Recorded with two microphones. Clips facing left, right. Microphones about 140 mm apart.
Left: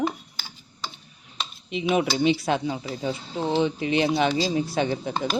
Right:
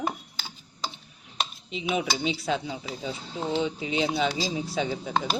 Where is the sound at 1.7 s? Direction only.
60° left (ahead or behind).